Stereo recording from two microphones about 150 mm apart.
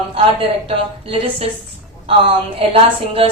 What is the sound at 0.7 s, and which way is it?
Speech, 40° right (ahead or behind).